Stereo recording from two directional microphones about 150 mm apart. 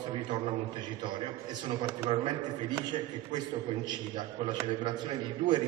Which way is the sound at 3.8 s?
30° right (ahead or behind).